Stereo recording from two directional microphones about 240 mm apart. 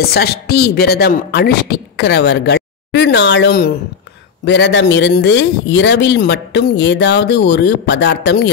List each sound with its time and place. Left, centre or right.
0.0 s speech: left